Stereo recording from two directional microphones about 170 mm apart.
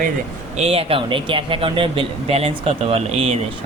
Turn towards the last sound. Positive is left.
turn(degrees=-35)  # may be behind; listen again after turning